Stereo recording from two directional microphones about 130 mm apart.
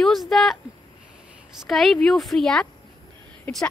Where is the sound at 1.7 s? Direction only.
Centre (ahead or behind).